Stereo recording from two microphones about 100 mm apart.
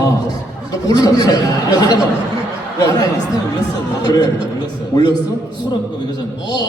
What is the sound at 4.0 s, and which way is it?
A man's voice, 40° left (ahead or behind).